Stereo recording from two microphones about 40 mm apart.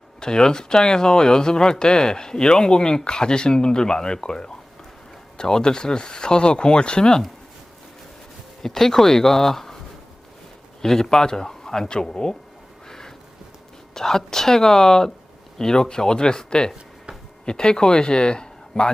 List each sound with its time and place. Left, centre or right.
0.2 s speech: centre
8.6 s speech: centre
10.8 s speech: centre
12.9 s a sound: centre
13.9 s speech: centre